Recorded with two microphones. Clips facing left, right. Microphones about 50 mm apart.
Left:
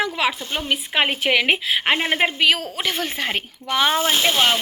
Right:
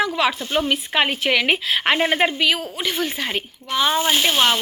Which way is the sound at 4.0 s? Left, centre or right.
Centre.